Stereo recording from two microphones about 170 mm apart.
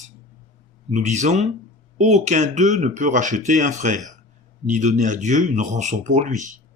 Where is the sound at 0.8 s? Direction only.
45° right (ahead or behind).